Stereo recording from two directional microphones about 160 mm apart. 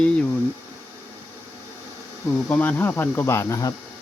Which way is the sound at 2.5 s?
10° left (ahead or behind).